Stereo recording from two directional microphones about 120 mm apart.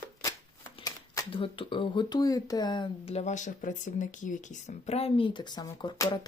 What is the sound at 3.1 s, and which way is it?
Speech, 80° left.